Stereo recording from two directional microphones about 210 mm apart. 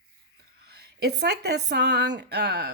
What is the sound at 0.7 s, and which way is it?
Speech, 50° right (ahead or behind).